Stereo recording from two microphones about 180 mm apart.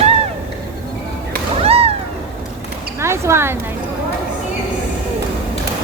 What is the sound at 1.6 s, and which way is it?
Whip, 35° right (ahead or behind).